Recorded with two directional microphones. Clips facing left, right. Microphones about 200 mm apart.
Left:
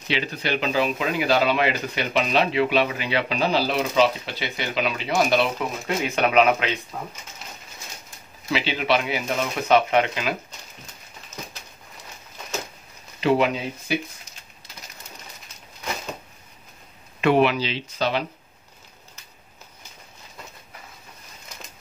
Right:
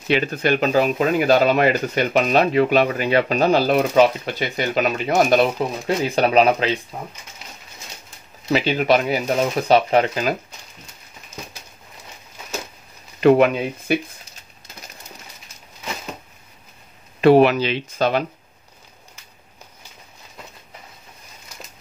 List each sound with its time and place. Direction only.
0.1 s speech: 50° right (ahead or behind); by 6.8 s 35° right (ahead or behind)
8.5 s speech: 45° right (ahead or behind)
13.2 s speech: 55° right (ahead or behind)
17.2 s speech: 40° right (ahead or behind)